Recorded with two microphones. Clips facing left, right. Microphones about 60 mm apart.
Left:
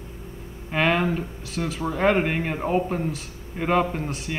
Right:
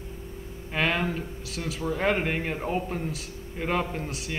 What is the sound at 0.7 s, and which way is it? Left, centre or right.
A man's voice, centre.